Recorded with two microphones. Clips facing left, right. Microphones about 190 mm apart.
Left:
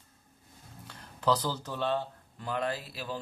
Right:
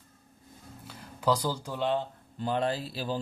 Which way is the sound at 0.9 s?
10° right (ahead or behind).